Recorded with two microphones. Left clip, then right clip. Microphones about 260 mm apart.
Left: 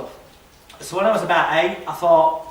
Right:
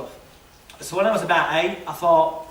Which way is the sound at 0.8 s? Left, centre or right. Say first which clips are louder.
Left 2 dB; centre.